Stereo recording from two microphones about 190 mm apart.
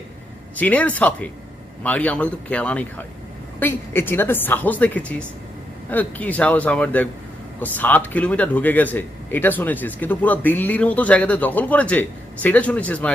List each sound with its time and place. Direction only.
0.5 s speech: 10° left (ahead or behind)